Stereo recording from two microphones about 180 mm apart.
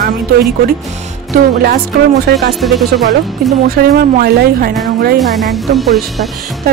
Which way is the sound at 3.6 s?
55° right (ahead or behind).